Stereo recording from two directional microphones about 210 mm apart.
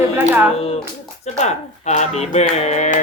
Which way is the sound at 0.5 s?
30° left (ahead or behind).